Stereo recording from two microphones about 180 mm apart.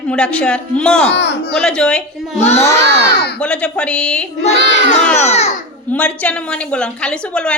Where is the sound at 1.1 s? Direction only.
75° left (ahead or behind).